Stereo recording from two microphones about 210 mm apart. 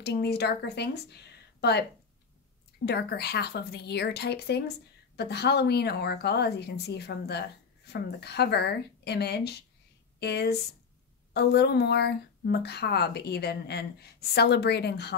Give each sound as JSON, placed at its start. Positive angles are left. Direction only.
{"t": 0.0, "sound": "a woman's voice", "side_deg": 50}